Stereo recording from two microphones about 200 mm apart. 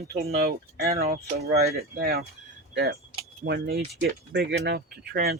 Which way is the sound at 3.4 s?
55° right (ahead or behind).